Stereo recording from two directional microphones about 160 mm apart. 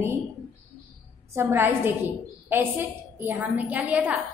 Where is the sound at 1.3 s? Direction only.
15° right (ahead or behind).